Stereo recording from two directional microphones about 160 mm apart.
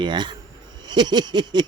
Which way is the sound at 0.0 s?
30° right (ahead or behind).